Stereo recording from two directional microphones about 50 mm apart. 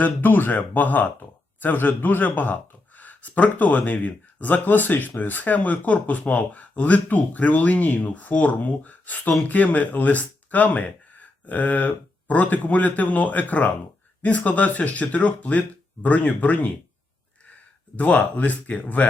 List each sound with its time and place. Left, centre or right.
0.0 s a man's voice: left
17.9 s a man's voice: left